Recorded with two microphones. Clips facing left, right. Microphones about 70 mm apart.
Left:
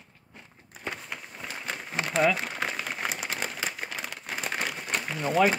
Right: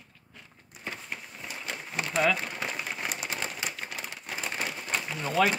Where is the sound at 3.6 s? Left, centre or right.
Left.